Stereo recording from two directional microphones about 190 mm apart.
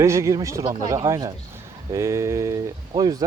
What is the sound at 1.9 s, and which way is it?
Speech, 15° right (ahead or behind).